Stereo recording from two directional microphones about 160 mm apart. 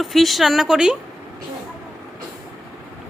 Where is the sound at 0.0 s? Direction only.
Centre (ahead or behind).